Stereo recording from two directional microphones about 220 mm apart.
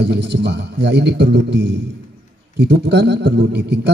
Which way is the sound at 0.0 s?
50° right (ahead or behind).